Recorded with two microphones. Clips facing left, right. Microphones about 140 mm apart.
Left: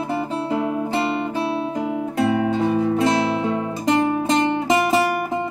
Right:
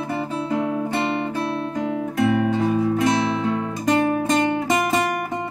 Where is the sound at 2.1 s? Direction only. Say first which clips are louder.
Even; 25° left (ahead or behind).